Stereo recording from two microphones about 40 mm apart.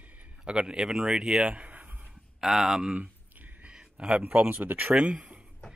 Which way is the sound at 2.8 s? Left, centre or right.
Right.